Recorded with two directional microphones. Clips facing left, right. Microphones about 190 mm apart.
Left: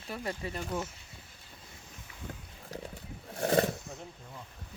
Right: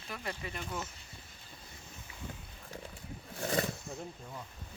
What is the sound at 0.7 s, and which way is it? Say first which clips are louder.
Speech: left 6 dB; 10° left (ahead or behind).